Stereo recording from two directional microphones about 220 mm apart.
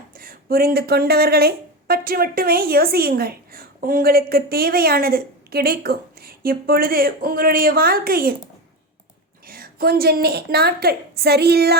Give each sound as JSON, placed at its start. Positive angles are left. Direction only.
{"t": 0.2, "sound": "speech", "side_deg": -40}
{"t": 9.5, "sound": "speech", "side_deg": -40}